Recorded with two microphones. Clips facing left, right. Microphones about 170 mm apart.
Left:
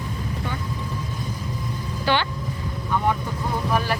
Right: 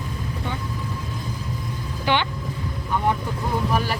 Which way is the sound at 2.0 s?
15° right (ahead or behind).